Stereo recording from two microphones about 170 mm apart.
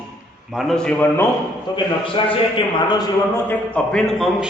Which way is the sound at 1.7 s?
30° left (ahead or behind).